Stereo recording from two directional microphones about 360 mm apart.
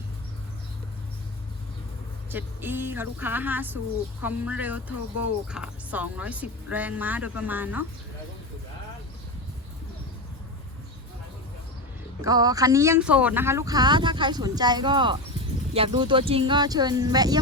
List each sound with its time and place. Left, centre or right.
2.3 s speech: centre
12.2 s speech: centre